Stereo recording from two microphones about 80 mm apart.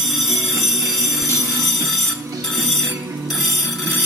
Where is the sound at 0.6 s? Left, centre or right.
Right.